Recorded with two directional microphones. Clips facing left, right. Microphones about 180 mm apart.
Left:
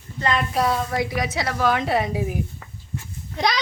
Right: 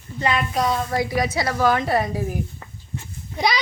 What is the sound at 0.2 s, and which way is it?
Speech, 10° right (ahead or behind).